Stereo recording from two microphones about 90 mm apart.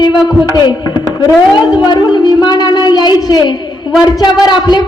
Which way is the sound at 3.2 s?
50° left (ahead or behind).